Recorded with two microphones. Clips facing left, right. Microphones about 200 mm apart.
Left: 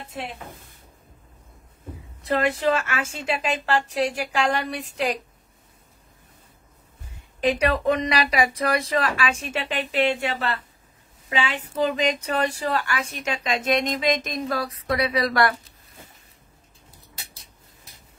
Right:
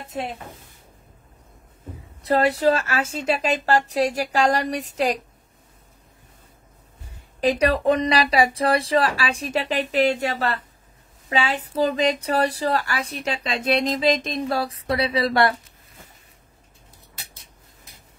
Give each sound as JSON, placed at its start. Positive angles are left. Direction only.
{"t": 2.2, "sound": "speech", "side_deg": -40}
{"t": 7.3, "sound": "speech", "side_deg": -35}